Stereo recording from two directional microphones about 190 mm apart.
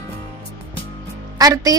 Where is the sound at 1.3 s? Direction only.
20° right (ahead or behind).